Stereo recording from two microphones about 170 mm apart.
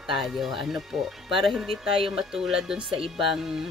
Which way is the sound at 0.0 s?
Centre (ahead or behind).